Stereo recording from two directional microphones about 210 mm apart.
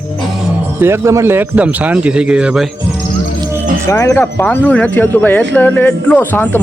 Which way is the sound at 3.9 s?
15° left (ahead or behind).